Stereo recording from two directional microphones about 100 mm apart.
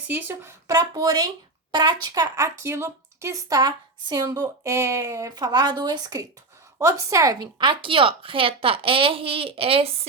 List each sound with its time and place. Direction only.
0.1 s speech: 20° right (ahead or behind)
0.7 s speech: 40° right (ahead or behind)
3.5 s speech: 40° right (ahead or behind)
7.3 s a woman's voice: 55° right (ahead or behind); by 10.1 s 75° right (ahead or behind)